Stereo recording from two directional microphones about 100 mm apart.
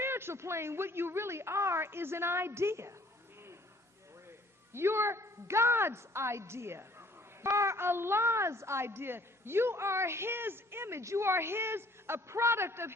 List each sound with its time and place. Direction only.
0.0 s a woman's voice: 25° right (ahead or behind)
4.7 s a woman's voice: 25° right (ahead or behind)